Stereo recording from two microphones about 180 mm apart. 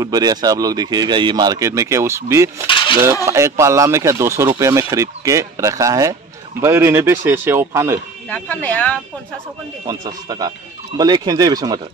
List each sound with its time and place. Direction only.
0.0 s speech: 20° right (ahead or behind)
2.6 s cutlery: 30° left (ahead or behind)
3.3 s speech: 15° right (ahead or behind)
8.3 s speech: 10° left (ahead or behind)
9.8 s speech: 20° right (ahead or behind)